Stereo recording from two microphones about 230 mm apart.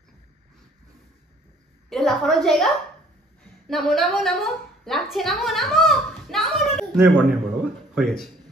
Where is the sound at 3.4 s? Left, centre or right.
Centre.